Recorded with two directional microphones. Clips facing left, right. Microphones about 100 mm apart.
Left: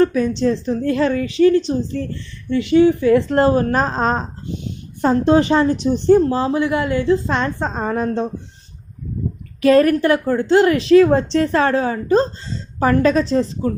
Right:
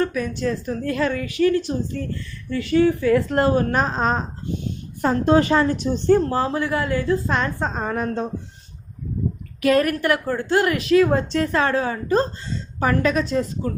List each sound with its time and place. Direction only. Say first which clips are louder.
0.0 s a woman's voice: left 7 dB; 30° left (ahead or behind)
2.5 s a woman's voice: left 5 dB; 20° left (ahead or behind)
5.0 s a woman's voice: left 3 dB; 25° left (ahead or behind)
9.6 s a woman's voice: left 6 dB; 30° left (ahead or behind)